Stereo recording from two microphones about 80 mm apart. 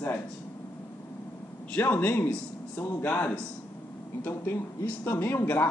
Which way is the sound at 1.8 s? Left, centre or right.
Left.